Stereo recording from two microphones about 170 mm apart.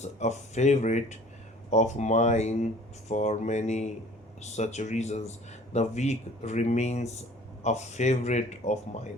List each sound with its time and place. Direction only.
0.0 s speech: 40° left (ahead or behind)